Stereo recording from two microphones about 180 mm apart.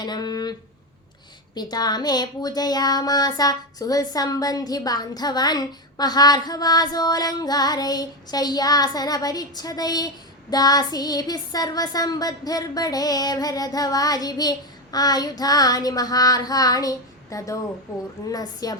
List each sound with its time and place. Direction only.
0.0 s a woman's voice: 25° left (ahead or behind)
1.5 s a woman's voice: 25° left (ahead or behind)